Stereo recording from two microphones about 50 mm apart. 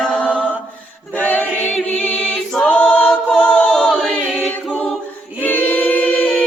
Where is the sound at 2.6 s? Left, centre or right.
Left.